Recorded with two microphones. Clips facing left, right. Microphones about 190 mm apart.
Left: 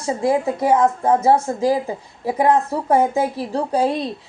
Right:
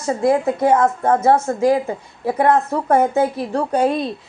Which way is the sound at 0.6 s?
10° left (ahead or behind).